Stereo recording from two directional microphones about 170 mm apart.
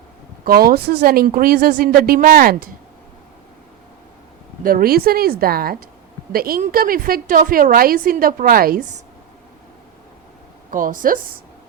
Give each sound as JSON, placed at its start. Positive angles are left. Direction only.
{"t": 0.4, "sound": "a woman's voice", "side_deg": -65}
{"t": 4.6, "sound": "a woman's voice", "side_deg": -60}
{"t": 10.7, "sound": "a woman's voice", "side_deg": -50}